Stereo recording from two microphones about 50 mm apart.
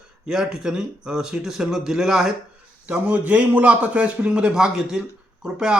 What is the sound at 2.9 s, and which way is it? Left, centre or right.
A man's voice, right.